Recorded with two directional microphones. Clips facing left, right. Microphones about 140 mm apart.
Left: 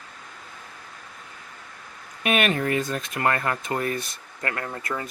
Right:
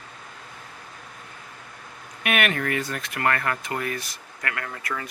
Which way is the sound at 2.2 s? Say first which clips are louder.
Left 2 dB; 25° left (ahead or behind).